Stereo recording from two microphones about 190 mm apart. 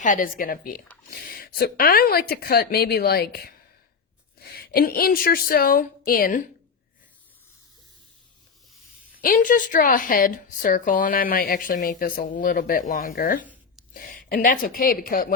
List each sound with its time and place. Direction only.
0.0 s a woman's voice: 45° left (ahead or behind)
9.2 s a woman's voice: 45° left (ahead or behind)
13.4 s a sound: 10° right (ahead or behind)
13.9 s a woman's voice: 45° left (ahead or behind)